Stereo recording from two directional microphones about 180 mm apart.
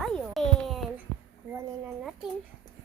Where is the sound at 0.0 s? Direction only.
Centre (ahead or behind).